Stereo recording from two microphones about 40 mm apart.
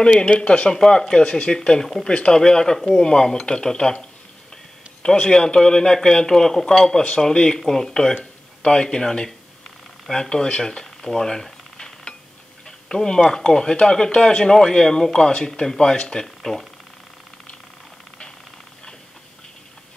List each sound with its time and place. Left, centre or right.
0.0 s speech: centre
8.1 s speech: left
10.6 s a sound: centre
12.6 s speech: centre
15.3 s speech: left
15.6 s speech: centre